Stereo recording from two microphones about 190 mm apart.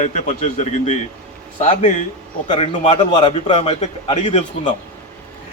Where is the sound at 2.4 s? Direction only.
25° left (ahead or behind).